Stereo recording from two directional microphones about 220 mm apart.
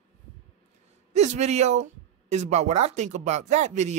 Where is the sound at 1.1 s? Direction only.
30° right (ahead or behind).